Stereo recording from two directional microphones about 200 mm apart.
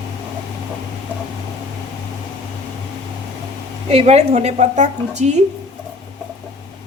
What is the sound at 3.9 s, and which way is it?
A woman's voice, 30° right (ahead or behind).